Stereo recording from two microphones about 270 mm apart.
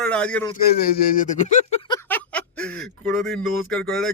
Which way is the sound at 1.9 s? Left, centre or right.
Centre.